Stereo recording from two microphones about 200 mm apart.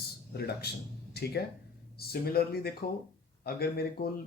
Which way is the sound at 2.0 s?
50° left (ahead or behind).